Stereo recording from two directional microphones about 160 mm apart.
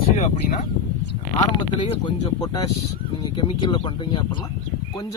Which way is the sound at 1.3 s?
30° left (ahead or behind).